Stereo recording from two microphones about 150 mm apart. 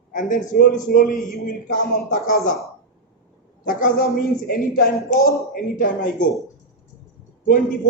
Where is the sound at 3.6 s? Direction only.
60° left (ahead or behind).